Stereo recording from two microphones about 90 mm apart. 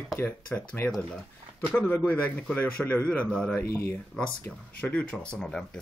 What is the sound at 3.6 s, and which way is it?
Speech, 30° left (ahead or behind).